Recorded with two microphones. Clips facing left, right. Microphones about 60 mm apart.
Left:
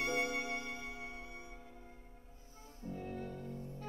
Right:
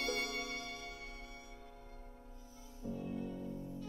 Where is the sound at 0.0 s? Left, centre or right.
Left.